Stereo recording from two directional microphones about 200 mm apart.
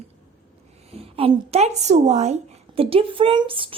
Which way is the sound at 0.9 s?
30° right (ahead or behind).